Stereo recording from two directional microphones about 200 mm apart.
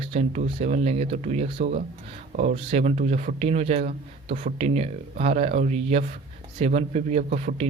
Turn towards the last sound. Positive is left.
turn(degrees=-35)  # may be behind; listen again after turning